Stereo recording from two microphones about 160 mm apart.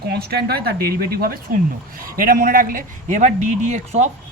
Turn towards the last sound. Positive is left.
turn(degrees=-45)  # may be behind; listen again after turning